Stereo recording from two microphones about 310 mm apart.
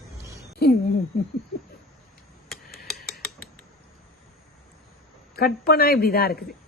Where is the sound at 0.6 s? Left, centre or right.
Left.